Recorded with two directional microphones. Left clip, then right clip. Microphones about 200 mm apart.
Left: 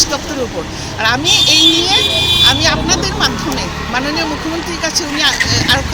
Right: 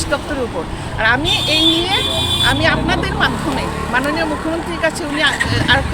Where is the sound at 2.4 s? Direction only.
5° right (ahead or behind).